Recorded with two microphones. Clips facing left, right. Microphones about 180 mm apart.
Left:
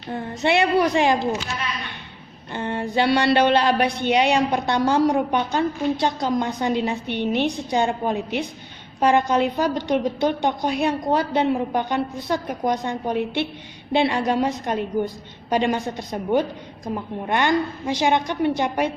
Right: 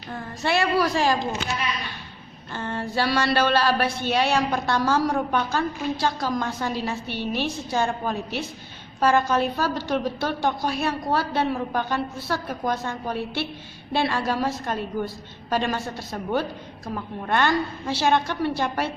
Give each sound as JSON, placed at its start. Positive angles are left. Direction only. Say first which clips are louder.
{"t": 0.1, "sound": "speech", "louder": "left 4 dB", "side_deg": 20}
{"t": 2.5, "sound": "a woman's voice", "louder": "left 4 dB", "side_deg": 20}